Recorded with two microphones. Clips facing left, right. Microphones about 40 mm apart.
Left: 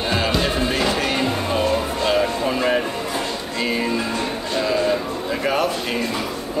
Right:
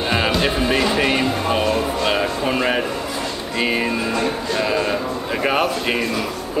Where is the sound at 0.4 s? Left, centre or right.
Right.